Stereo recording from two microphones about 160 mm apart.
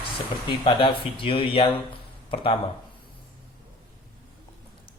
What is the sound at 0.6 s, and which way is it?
A man's voice, 30° left (ahead or behind).